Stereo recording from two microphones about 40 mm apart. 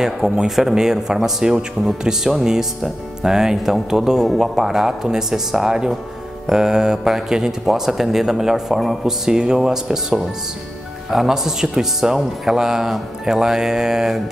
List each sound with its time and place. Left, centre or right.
0.0 s speech: centre